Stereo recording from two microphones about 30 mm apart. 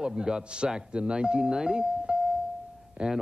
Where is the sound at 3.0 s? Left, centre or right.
Right.